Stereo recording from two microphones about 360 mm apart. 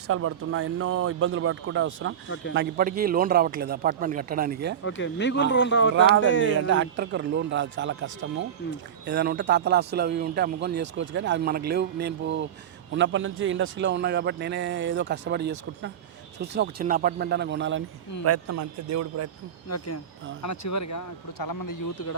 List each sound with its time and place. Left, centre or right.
0.1 s a man's voice: right
4.8 s speech: left
6.7 s a man's voice: right
18.3 s a man's voice: right
19.7 s speech: left